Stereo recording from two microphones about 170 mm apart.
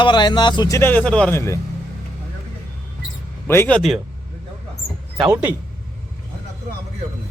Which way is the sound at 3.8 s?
Centre (ahead or behind).